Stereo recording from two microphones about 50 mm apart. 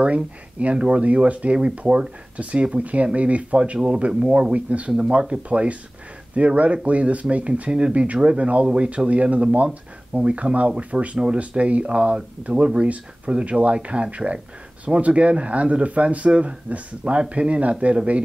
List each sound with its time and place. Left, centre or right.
0.0 s speech: right